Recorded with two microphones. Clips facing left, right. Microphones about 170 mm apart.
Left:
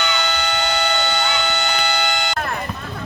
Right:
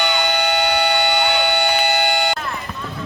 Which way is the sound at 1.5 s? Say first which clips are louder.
Right 4 dB; 50° right (ahead or behind).